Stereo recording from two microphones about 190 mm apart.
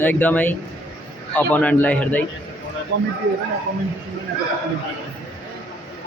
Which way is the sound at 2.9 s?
60° right (ahead or behind).